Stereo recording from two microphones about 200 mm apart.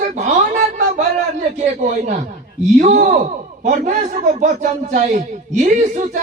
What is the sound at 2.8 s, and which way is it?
A man's voice, 40° right (ahead or behind).